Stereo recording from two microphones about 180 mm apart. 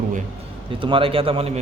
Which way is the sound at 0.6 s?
30° right (ahead or behind).